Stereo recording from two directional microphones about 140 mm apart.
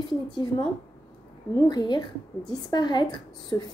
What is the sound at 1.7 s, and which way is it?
A woman's voice, 30° left (ahead or behind).